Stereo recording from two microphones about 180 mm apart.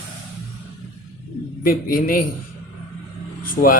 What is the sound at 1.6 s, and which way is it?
Speech, 50° left (ahead or behind).